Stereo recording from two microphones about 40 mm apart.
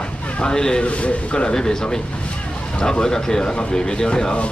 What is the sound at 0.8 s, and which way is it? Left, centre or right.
Speech, left.